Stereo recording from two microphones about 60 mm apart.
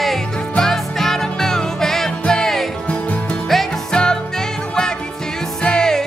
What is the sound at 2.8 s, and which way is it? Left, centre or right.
Music, left.